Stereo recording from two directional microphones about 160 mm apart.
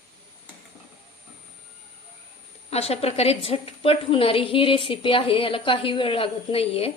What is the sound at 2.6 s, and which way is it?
A woman's voice, 40° left (ahead or behind).